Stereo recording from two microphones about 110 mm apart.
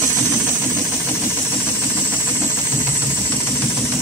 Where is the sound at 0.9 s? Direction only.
20° left (ahead or behind).